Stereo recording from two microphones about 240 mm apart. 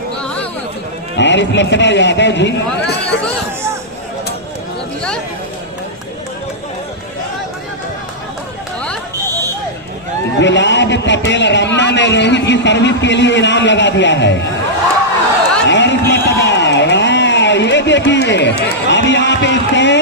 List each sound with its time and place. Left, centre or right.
1.1 s a man's voice: left
10.4 s a man's voice: left
15.6 s a sound: left